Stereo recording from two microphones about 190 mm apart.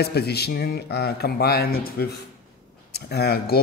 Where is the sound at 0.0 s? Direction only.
60° left (ahead or behind).